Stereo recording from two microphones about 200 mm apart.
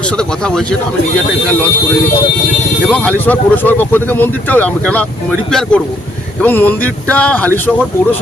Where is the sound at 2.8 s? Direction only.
5° left (ahead or behind).